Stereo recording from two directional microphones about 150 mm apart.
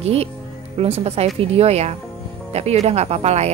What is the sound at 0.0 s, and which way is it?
Speech, 40° right (ahead or behind).